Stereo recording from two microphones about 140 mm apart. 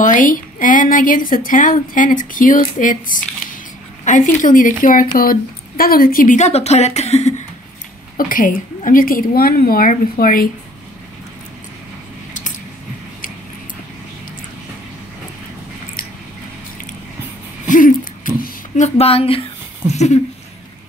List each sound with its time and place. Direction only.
0.0 s a woman's voice: 70° left (ahead or behind)
5.2 s speech: 90° left; by 7.3 s 50° left (ahead or behind)
8.2 s a woman's voice: 75° left (ahead or behind)
17.6 s a sound: 70° left (ahead or behind)
18.9 s speech: 45° left (ahead or behind)